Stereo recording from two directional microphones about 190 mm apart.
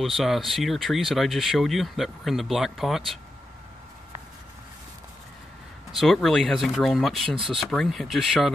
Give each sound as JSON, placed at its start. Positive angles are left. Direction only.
{"t": 0.0, "sound": "speech", "side_deg": 0}
{"t": 5.9, "sound": "speech", "side_deg": 0}